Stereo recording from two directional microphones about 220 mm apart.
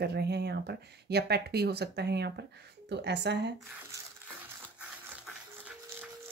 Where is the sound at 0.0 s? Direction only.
50° right (ahead or behind).